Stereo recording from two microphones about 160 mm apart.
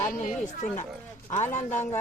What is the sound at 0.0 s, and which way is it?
A man's voice, 50° left (ahead or behind).